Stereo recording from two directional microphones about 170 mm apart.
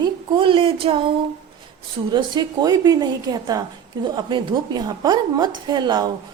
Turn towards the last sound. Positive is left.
turn(degrees=-25)  # may be behind; listen again after turning